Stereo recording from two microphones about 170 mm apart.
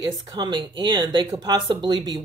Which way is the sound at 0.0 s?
25° right (ahead or behind).